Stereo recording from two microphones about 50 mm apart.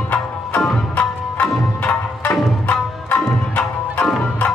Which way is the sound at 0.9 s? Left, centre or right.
Left.